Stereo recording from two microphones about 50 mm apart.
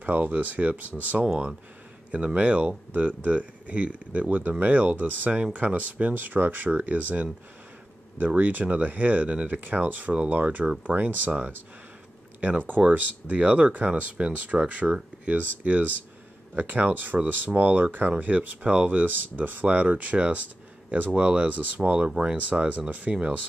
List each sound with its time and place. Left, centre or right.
0.0 s speech: right
1.2 s speech: centre; by 11.3 s right
12.4 s speech: right
22.1 s speech: centre
22.4 s speech: right